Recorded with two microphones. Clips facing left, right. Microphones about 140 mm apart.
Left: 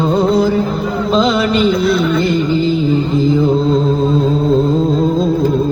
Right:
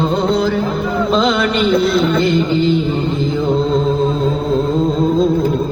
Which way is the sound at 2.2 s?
40° left (ahead or behind).